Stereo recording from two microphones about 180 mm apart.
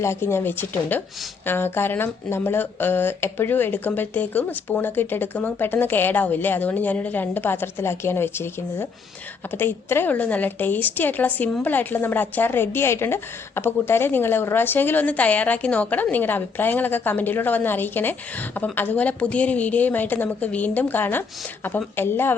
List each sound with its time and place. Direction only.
0.0 s a woman's voice: 15° left (ahead or behind)